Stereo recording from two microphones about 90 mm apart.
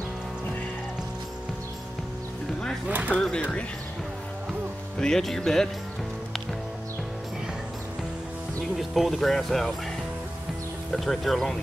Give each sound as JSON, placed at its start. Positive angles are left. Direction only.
{"t": 2.9, "sound": "speech", "side_deg": -15}
{"t": 3.2, "sound": "speech", "side_deg": 5}
{"t": 4.9, "sound": "speech", "side_deg": 5}
{"t": 8.7, "sound": "speech", "side_deg": 0}
{"t": 10.9, "sound": "speech", "side_deg": 0}